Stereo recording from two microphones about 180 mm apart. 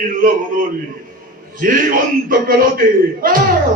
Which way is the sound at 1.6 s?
50° right (ahead or behind).